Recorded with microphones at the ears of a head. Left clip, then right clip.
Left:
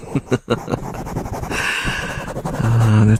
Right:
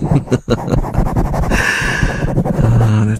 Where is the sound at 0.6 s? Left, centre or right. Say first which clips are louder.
Right 6 dB; right.